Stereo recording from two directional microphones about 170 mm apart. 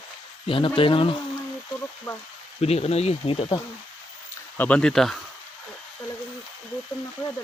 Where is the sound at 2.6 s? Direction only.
35° left (ahead or behind).